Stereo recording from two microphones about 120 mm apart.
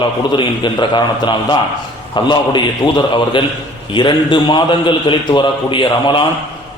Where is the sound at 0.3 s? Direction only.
40° left (ahead or behind).